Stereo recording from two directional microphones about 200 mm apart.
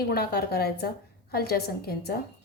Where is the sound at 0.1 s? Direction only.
50° left (ahead or behind).